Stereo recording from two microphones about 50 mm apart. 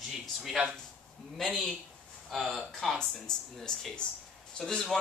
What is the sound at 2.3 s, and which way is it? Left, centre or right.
A man's voice, centre.